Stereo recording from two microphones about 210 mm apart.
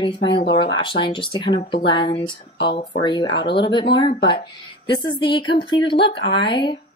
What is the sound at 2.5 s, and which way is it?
Speech, 50° left (ahead or behind).